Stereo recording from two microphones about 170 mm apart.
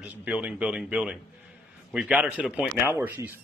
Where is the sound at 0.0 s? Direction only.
10° right (ahead or behind).